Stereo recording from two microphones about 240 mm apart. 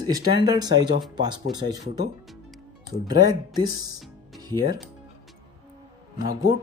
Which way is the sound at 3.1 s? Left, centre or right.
Centre.